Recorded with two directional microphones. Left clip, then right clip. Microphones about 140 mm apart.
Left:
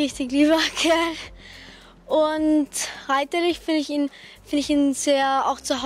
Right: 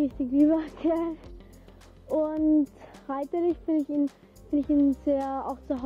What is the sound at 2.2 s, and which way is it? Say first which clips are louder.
Speech: left 4 dB; 30° right (ahead or behind).